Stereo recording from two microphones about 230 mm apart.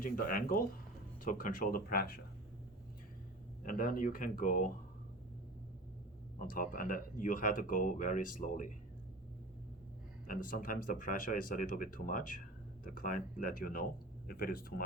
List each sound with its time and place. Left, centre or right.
0.0 s speech: left
3.6 s speech: left
6.5 s speech: left
10.5 s speech: left